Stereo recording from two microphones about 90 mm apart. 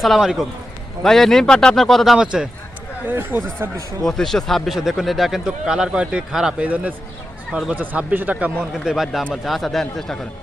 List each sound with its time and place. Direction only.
0.0 s speech: centre (ahead or behind)
2.1 s speech: 10° right (ahead or behind)
3.1 s speech: 25° right (ahead or behind)
4.0 s speech: 5° left (ahead or behind)
7.7 s speech: 15° right (ahead or behind)
8.7 s speech: 5° right (ahead or behind)